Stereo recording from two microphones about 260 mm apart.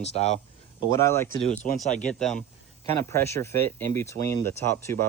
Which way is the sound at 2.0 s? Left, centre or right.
Centre.